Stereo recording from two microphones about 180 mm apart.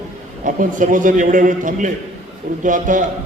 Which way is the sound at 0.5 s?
45° right (ahead or behind).